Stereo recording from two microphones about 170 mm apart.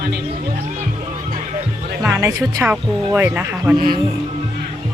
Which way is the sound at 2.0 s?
15° right (ahead or behind).